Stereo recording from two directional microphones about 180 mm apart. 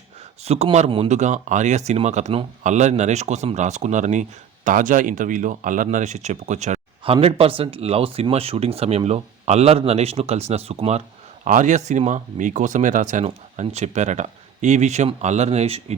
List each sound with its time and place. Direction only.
0.4 s speech: 35° right (ahead or behind)